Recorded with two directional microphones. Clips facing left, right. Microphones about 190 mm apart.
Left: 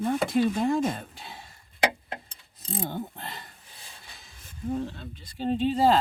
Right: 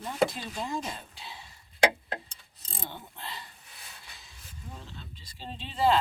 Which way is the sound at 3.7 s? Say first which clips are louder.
Left 2 dB; 30° left (ahead or behind).